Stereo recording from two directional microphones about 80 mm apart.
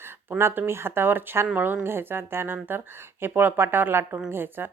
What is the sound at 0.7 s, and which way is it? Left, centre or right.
Speech, right.